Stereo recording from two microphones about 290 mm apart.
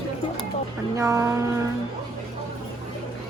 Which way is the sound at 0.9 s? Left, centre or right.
Centre.